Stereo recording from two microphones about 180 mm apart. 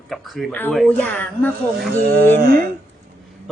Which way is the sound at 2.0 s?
60° right (ahead or behind).